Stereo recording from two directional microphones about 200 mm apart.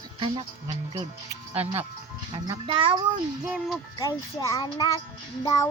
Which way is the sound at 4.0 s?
15° left (ahead or behind).